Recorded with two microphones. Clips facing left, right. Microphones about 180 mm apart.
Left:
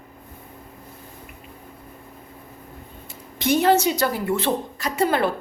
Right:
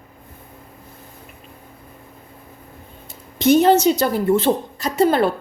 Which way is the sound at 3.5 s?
20° right (ahead or behind).